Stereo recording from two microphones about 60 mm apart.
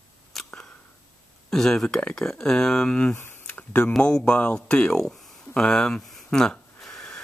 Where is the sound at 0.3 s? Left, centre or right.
Centre.